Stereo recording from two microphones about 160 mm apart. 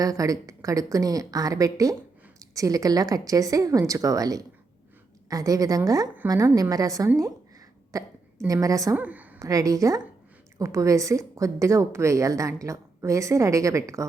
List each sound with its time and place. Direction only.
0.0 s a woman's voice: 20° right (ahead or behind)
9.0 s a woman's voice: 10° right (ahead or behind)
9.5 s a woman's voice: 20° right (ahead or behind)